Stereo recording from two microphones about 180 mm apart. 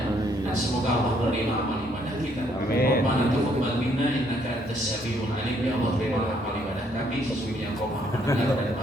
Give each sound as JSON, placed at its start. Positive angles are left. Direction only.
{"t": 2.7, "sound": "speech", "side_deg": 55}